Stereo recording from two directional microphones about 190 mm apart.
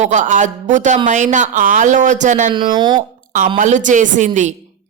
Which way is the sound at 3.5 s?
40° right (ahead or behind).